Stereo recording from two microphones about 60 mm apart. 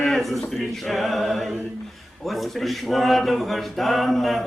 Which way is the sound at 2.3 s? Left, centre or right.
Centre.